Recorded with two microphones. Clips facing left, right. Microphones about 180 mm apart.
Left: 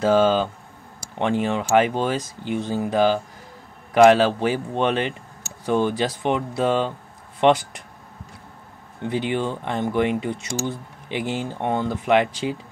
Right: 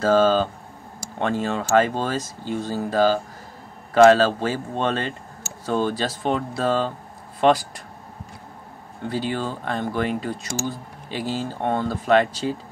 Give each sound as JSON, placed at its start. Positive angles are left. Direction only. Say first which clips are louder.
{"t": 0.0, "sound": "speech", "louder": "even", "side_deg": 15}
{"t": 9.0, "sound": "speech", "louder": "left 2 dB", "side_deg": 20}